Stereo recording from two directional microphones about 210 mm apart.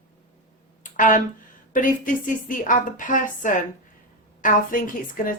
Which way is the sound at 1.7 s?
40° left (ahead or behind).